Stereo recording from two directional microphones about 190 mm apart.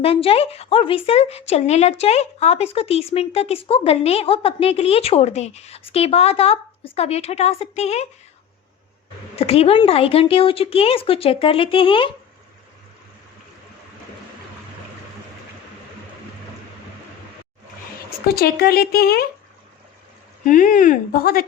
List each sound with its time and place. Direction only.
0.0 s speech: 30° left (ahead or behind)
9.3 s a woman's voice: 30° left (ahead or behind)
18.3 s speech: 55° left (ahead or behind)
20.4 s speech: 45° left (ahead or behind)